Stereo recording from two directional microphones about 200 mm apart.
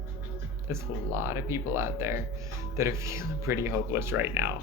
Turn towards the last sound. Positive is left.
turn(degrees=-10)  # may be behind; listen again after turning